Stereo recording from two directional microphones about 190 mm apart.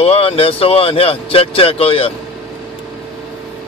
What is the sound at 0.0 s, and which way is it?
Speech, 30° left (ahead or behind).